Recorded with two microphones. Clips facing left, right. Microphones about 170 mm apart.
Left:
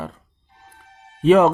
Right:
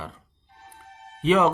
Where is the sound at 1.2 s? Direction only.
45° left (ahead or behind).